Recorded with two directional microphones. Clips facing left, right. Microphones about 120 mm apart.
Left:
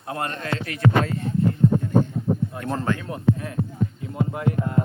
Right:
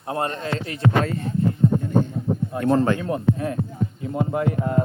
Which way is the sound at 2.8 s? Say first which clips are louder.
Right 2 dB; 30° right (ahead or behind).